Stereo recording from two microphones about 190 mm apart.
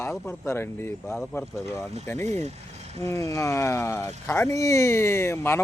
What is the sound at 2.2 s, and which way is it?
Speech, 35° right (ahead or behind).